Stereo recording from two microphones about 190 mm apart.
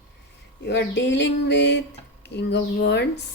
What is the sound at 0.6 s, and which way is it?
Speech, 65° left (ahead or behind).